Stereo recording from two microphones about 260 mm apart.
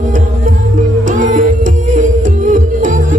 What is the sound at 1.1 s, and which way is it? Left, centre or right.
Music, right.